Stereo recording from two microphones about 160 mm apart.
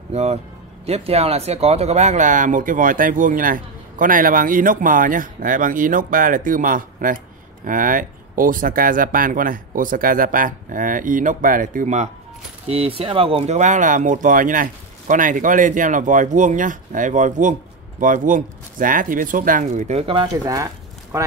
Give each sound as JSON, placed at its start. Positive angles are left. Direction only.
{"t": 0.1, "sound": "speech", "side_deg": -40}
{"t": 12.6, "sound": "speech", "side_deg": -40}
{"t": 20.4, "sound": "speech", "side_deg": -20}